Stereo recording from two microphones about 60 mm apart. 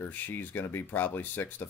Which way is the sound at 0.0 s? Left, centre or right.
Left.